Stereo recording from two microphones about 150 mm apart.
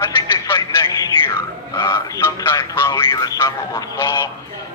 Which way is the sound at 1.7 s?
15° left (ahead or behind).